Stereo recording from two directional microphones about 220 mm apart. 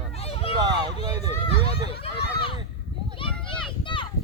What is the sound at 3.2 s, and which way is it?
Children playing, 25° left (ahead or behind).